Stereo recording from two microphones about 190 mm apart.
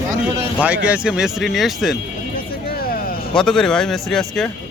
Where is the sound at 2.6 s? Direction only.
50° left (ahead or behind).